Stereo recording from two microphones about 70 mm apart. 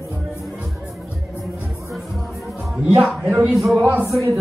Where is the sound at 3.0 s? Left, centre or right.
Centre.